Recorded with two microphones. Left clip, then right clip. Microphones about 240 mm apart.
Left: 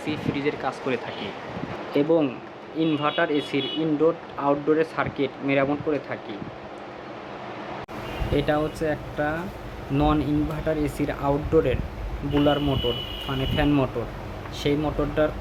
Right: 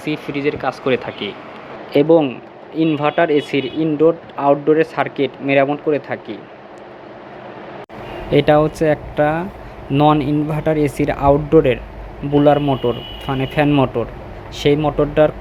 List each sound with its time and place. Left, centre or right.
0.0 s speech: centre
8.3 s speech: right